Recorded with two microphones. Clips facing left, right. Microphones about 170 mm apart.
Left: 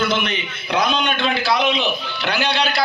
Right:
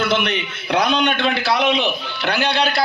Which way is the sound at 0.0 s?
65° right (ahead or behind).